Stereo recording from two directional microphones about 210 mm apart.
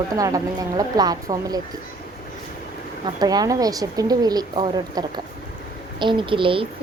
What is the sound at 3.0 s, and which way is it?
A woman's voice, 20° right (ahead or behind).